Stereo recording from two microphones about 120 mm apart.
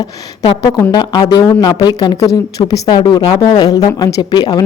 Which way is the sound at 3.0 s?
45° left (ahead or behind).